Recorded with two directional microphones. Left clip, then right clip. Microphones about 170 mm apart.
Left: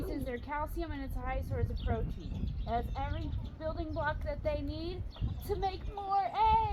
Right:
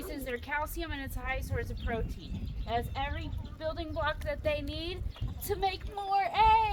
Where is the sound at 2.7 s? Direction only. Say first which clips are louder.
Right 3 dB; 45° right (ahead or behind).